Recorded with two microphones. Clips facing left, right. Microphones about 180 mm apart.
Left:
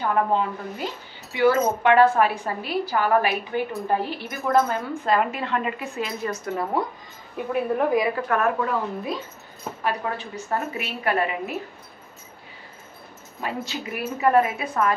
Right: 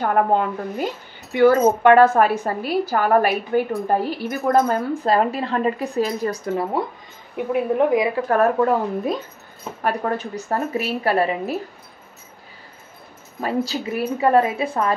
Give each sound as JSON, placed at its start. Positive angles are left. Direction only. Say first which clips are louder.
{"t": 0.0, "sound": "a woman's voice", "louder": "right 4 dB", "side_deg": -50}
{"t": 7.3, "sound": "a woman's voice", "louder": "right 4 dB", "side_deg": -20}
{"t": 8.3, "sound": "a woman's voice", "louder": "right 6 dB", "side_deg": -40}
{"t": 13.4, "sound": "a woman's voice", "louder": "right 7 dB", "side_deg": -35}